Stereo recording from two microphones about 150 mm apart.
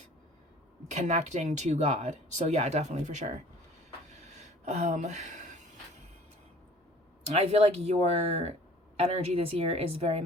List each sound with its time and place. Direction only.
0.9 s speech: 50° right (ahead or behind)
4.1 s a sound: 50° right (ahead or behind)
7.3 s speech: 45° right (ahead or behind)